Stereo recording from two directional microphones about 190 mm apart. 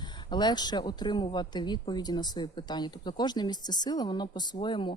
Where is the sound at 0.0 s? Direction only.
25° left (ahead or behind).